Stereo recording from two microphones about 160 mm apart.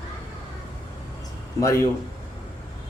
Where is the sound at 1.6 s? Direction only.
20° left (ahead or behind).